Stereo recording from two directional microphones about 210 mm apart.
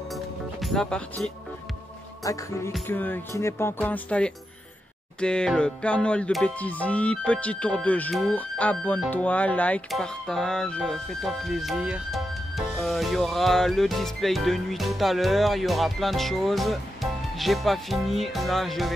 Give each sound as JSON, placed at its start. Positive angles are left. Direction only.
{"t": 0.1, "sound": "music", "side_deg": 0}
{"t": 2.2, "sound": "speech", "side_deg": 15}
{"t": 5.2, "sound": "music", "side_deg": 5}